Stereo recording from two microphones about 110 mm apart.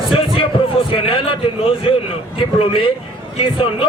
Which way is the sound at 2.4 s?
55° left (ahead or behind).